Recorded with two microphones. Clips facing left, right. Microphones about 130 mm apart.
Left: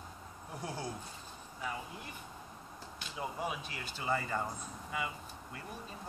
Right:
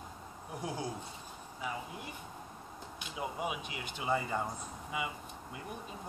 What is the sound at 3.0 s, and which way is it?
Speech, 15° right (ahead or behind).